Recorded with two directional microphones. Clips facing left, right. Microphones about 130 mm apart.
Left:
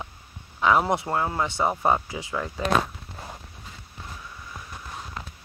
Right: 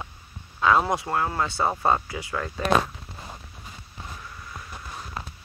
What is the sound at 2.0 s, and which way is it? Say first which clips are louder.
Speech: even; 20° left (ahead or behind).